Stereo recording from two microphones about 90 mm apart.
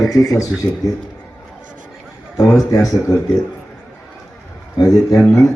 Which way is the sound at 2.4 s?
40° left (ahead or behind).